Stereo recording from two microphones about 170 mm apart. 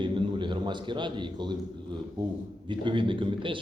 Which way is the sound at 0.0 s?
30° right (ahead or behind).